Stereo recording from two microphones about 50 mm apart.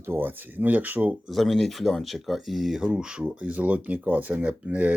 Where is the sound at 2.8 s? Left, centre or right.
Centre.